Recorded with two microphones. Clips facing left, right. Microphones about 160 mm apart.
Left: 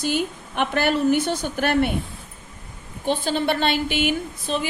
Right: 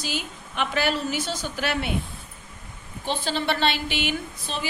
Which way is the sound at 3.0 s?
50° left (ahead or behind).